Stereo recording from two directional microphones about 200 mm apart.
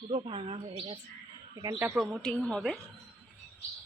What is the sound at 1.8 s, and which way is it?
A woman's voice, 5° right (ahead or behind).